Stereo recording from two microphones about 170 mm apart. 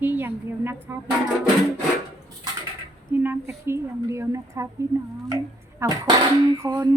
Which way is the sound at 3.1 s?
10° right (ahead or behind).